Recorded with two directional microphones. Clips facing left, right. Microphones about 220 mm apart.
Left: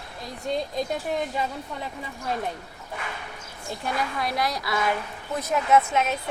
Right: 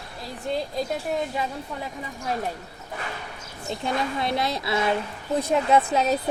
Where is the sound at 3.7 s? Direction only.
25° right (ahead or behind).